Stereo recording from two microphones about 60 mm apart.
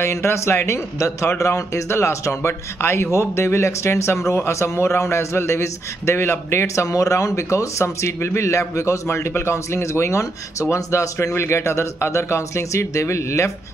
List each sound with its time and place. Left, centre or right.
0.0 s a man's voice: left
7.8 s a man's voice: left